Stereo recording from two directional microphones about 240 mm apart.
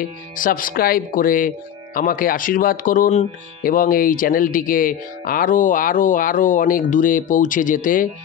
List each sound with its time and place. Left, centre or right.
0.4 s speech: left